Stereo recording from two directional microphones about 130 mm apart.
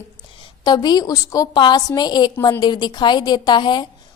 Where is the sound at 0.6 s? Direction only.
35° left (ahead or behind).